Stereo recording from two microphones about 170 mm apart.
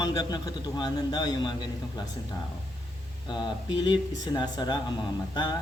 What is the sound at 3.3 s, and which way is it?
A man's voice, 25° left (ahead or behind).